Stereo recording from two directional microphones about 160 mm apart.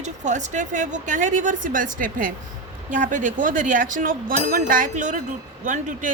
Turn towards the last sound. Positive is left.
turn(degrees=-50)  # may be behind; listen again after turning